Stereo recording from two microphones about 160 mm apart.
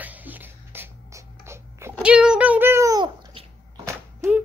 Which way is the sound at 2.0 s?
5° right (ahead or behind).